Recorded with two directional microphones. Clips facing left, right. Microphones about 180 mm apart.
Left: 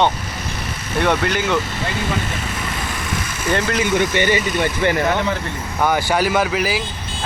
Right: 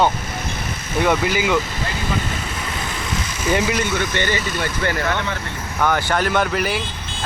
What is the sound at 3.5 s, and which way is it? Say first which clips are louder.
Speech: even; 10° right (ahead or behind).